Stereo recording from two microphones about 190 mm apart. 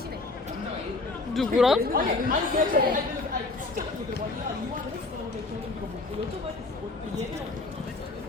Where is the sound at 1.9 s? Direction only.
45° right (ahead or behind).